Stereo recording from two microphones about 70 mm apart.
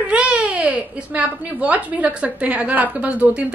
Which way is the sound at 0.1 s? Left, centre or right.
Centre.